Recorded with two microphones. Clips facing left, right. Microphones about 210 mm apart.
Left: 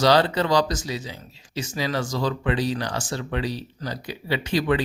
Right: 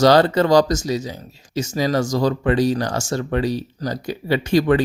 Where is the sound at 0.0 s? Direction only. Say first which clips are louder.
Right 5 dB; 45° right (ahead or behind).